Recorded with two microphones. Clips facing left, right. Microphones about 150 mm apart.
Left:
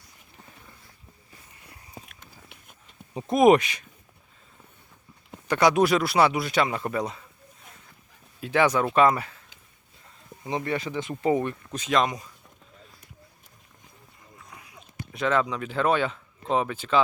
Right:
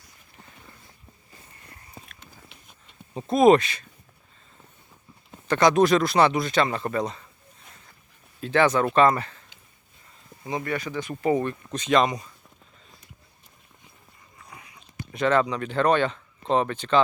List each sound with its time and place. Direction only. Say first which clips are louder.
1.6 s a sound: left 2 dB; 10° left (ahead or behind)
3.2 s speech: right 1 dB; 15° left (ahead or behind)
5.3 s speech: right 1 dB; 10° left (ahead or behind)
8.4 s speech: right 1 dB; 10° left (ahead or behind)
10.4 s speech: even; 25° left (ahead or behind)
11.7 s speech: right 3 dB; 5° left (ahead or behind)
14.3 s a sound: right 1 dB; centre (ahead or behind)